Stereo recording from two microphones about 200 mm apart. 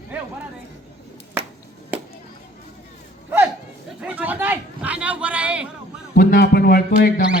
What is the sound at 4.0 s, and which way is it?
Speech, 5° right (ahead or behind).